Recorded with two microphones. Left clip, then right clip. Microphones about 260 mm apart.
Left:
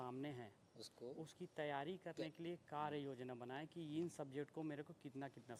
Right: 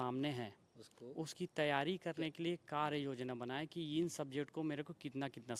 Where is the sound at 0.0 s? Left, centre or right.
Right.